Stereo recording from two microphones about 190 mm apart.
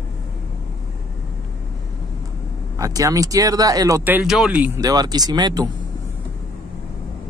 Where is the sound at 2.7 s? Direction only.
20° right (ahead or behind).